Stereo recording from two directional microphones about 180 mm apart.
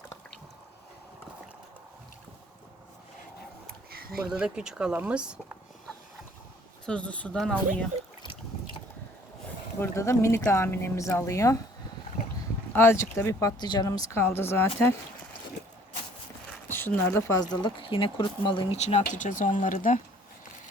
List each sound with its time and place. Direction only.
3.9 s a sound: 55° right (ahead or behind)
4.2 s speech: 5° right (ahead or behind)
6.8 s speech: 5° left (ahead or behind)
9.8 s speech: 15° left (ahead or behind)
12.7 s speech: 15° left (ahead or behind)
16.6 s speech: 10° left (ahead or behind); by 20.0 s 45° left (ahead or behind)